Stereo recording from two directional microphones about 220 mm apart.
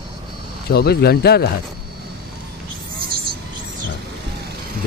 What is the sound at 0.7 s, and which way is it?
Speech, 45° left (ahead or behind).